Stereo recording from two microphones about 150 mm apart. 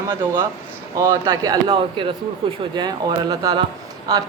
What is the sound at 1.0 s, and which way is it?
Speech, 25° right (ahead or behind).